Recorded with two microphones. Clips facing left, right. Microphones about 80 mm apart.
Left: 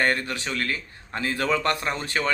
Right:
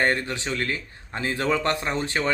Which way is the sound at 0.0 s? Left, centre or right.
Right.